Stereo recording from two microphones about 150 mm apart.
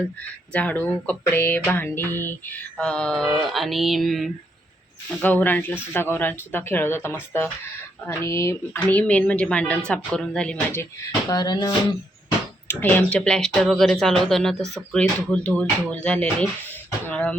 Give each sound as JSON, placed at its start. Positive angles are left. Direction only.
{"t": 0.2, "sound": "speech", "side_deg": 10}
{"t": 5.2, "sound": "speech", "side_deg": 10}
{"t": 11.3, "sound": "speech", "side_deg": 25}
{"t": 12.6, "sound": "speech", "side_deg": 10}
{"t": 17.1, "sound": "beatboxing", "side_deg": 5}